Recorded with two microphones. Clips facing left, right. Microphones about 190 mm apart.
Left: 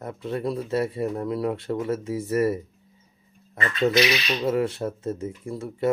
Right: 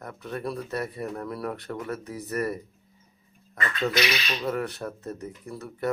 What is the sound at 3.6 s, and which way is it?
Speech, 25° left (ahead or behind).